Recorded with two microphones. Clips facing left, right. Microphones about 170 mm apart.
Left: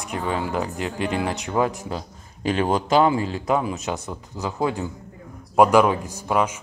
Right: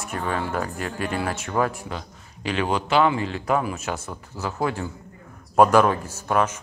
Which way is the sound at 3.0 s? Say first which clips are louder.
Left 2 dB; 30° left (ahead or behind).